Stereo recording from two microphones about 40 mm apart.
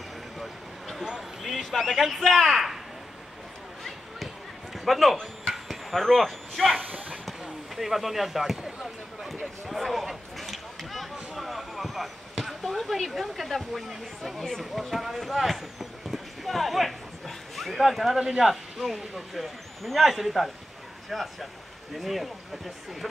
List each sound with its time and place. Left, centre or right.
0.4 s vehicle: centre
1.4 s a sound: centre
2.0 s speech: centre
4.7 s a man's voice: centre
5.1 s speech: centre
5.5 s a sound: centre
5.9 s speech: centre
7.2 s a sound: centre
14.4 s speech: centre